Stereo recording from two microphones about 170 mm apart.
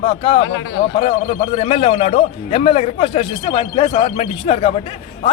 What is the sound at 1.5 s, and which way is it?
A man's voice, 35° left (ahead or behind).